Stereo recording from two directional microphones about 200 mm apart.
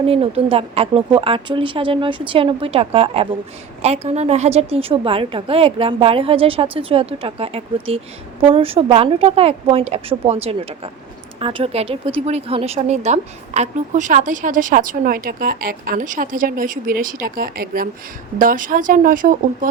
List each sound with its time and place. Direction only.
0.0 s a woman's voice: 30° right (ahead or behind)